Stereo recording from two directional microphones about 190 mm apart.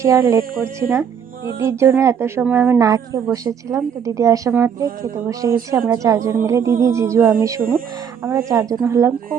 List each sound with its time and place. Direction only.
0.0 s a woman's voice: 15° right (ahead or behind)